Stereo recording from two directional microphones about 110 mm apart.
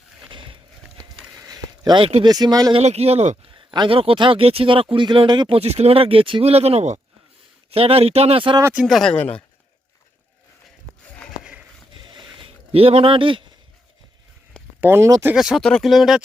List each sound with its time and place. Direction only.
1.5 s a sound: 35° right (ahead or behind)
2.2 s speech: 35° right (ahead or behind)
2.8 s speech: 70° right (ahead or behind)
3.5 s speech: 45° right (ahead or behind)
5.5 s speech: 70° right (ahead or behind)
7.7 s speech: 60° right (ahead or behind)
8.7 s speech: 5° right (ahead or behind)
9.1 s speech: 15° left (ahead or behind)
12.0 s mechanisms: 45° right (ahead or behind)
12.7 s speech: 60° right (ahead or behind)
14.8 s speech: 20° right (ahead or behind)
15.4 s speech: centre (ahead or behind)